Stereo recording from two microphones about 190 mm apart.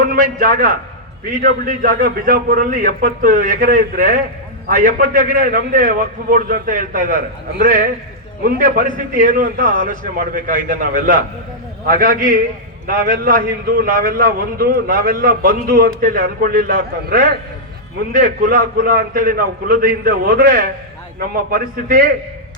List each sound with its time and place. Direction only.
0.0 s a man's voice: 50° right (ahead or behind)
8.4 s a man's voice: 50° right (ahead or behind)